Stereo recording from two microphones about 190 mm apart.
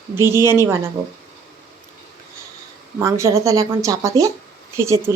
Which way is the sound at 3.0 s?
15° right (ahead or behind).